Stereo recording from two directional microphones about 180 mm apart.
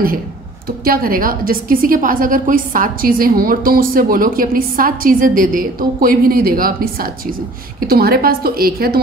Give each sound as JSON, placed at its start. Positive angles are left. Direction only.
{"t": 0.7, "sound": "a woman's voice", "side_deg": -55}